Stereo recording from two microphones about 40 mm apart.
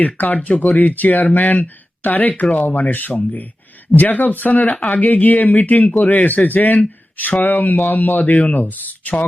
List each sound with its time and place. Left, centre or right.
0.0 s speech: left